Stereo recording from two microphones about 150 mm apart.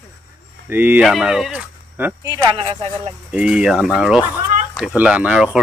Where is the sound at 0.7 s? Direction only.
15° right (ahead or behind).